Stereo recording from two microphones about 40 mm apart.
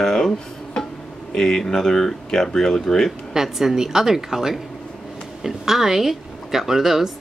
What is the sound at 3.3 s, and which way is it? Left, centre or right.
Speech, centre.